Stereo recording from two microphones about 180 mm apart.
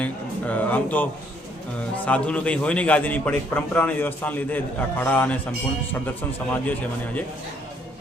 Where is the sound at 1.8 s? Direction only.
5° left (ahead or behind).